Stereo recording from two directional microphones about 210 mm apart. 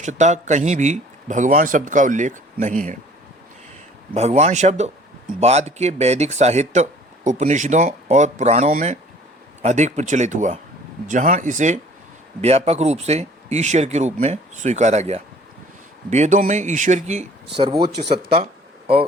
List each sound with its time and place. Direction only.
0.0 s speech: 35° right (ahead or behind)
4.1 s speech: 30° right (ahead or behind)
17.7 s speech: 50° right (ahead or behind)